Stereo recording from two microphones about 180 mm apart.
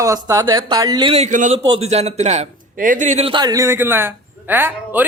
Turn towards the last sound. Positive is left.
turn(degrees=-10)  # may be behind; listen again after turning